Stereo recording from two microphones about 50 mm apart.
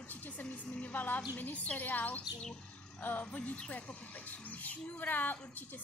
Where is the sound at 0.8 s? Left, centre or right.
Left.